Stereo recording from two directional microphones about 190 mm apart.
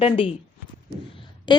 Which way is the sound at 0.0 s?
30° left (ahead or behind).